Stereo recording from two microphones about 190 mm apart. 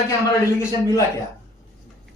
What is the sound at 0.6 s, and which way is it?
Speech, 15° left (ahead or behind).